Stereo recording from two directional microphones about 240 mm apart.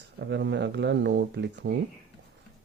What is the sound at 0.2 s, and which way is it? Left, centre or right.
Speech, right.